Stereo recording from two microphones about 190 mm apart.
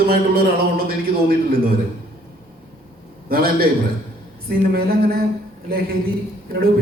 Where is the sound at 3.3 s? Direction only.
50° right (ahead or behind).